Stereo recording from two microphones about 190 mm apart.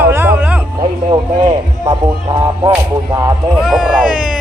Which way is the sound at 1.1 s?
25° right (ahead or behind).